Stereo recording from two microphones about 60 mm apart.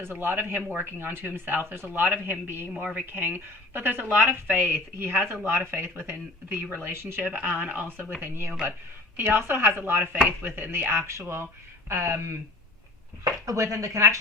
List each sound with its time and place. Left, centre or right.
0.0 s speech: right
2.7 s speech: right
3.1 s speech: right
7.2 s speech: right
13.2 s speech: right